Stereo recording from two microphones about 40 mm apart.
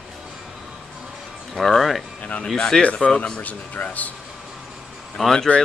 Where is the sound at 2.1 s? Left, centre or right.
Left.